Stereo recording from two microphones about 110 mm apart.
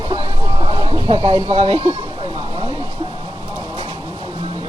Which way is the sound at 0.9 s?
55° right (ahead or behind).